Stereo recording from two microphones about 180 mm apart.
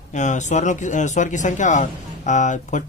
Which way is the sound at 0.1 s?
40° left (ahead or behind).